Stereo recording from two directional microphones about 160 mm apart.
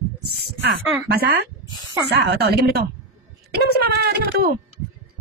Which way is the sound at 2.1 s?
90° right.